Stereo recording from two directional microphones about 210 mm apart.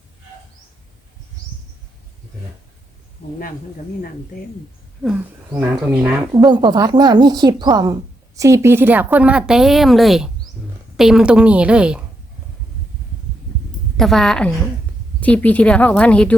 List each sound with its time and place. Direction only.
5.0 s speech: 5° right (ahead or behind)
6.3 s speech: 20° right (ahead or behind); by 12.0 s 5° right (ahead or behind)
13.9 s a woman's voice: centre (ahead or behind)